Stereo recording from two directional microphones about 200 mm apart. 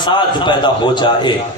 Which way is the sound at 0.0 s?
20° left (ahead or behind).